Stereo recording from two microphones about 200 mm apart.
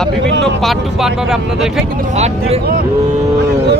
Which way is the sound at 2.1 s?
35° right (ahead or behind).